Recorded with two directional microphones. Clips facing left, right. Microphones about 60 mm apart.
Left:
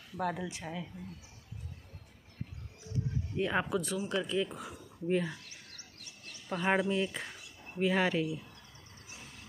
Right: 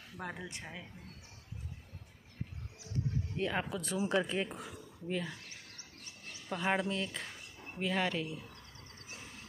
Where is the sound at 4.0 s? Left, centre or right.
Right.